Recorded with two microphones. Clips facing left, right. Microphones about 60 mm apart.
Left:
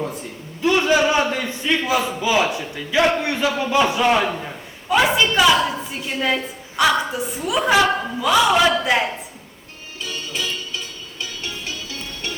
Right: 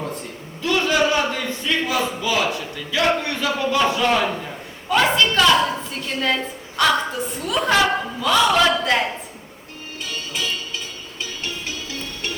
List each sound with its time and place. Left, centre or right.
0.0 s a man's voice: centre
0.6 s a sound: centre
1.2 s speech: centre
1.8 s a man's voice: centre
2.2 s a man's voice: centre